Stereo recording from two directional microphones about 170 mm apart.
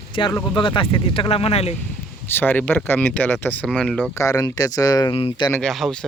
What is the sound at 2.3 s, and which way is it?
Speech, 10° left (ahead or behind).